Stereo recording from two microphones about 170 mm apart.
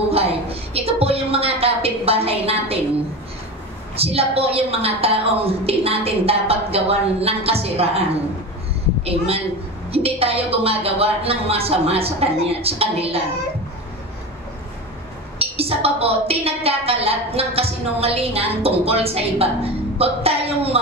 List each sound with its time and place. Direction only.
0.1 s a sound: 35° right (ahead or behind)
3.9 s a woman's voice: 35° right (ahead or behind)
9.0 s a woman's voice: 35° right (ahead or behind)
15.3 s a woman's voice: 35° right (ahead or behind)